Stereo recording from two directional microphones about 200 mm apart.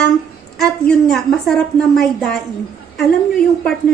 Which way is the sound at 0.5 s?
5° left (ahead or behind).